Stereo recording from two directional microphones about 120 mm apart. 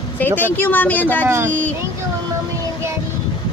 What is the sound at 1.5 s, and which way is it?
Vehicle, 15° left (ahead or behind).